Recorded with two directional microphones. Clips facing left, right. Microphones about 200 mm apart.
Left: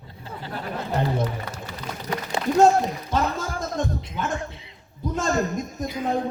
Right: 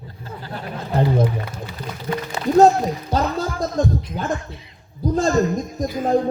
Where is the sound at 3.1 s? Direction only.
35° right (ahead or behind).